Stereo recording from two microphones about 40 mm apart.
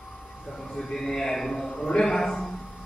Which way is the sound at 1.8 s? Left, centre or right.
Centre.